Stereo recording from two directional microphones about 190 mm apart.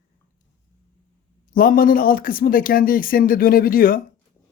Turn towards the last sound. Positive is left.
turn(degrees=50)  # may be behind; listen again after turning